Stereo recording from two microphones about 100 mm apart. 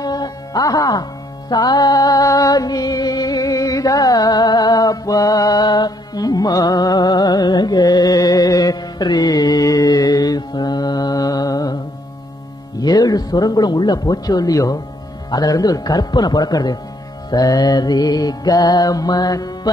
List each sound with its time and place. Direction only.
0.0 s music: 40° left (ahead or behind)
12.7 s a man's voice: 40° left (ahead or behind)
15.3 s music: 40° left (ahead or behind)